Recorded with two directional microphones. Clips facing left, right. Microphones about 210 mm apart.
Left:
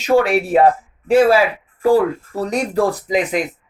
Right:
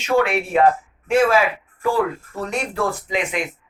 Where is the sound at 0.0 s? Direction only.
35° left (ahead or behind).